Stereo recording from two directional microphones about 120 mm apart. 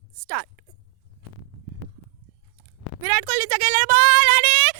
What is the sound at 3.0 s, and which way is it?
Speech, 35° right (ahead or behind).